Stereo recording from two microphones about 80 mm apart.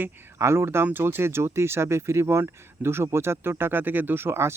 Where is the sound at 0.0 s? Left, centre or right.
Right.